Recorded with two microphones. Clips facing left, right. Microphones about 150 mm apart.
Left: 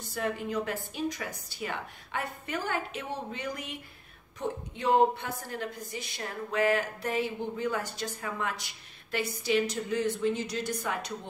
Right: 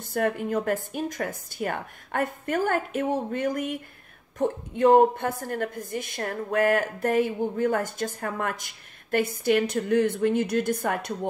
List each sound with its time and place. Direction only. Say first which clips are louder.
0.0 s a woman's voice: right 7 dB; 55° right (ahead or behind)